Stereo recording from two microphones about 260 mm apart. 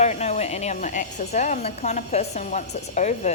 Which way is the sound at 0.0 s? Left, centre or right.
Left.